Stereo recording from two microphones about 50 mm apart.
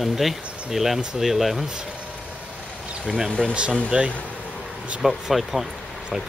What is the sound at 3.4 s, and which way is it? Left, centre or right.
Speech, right.